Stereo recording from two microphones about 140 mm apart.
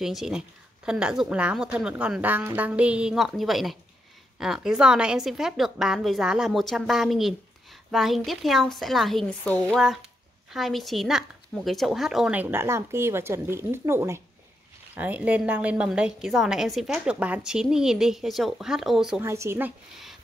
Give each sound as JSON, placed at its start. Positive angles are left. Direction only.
{"t": 0.0, "sound": "a woman's voice", "side_deg": 0}
{"t": 19.2, "sound": "speech", "side_deg": -20}